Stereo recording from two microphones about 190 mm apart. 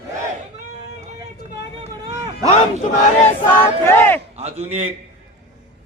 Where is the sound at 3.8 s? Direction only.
10° left (ahead or behind).